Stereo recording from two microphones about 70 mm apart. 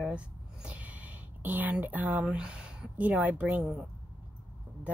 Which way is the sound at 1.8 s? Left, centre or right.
Right.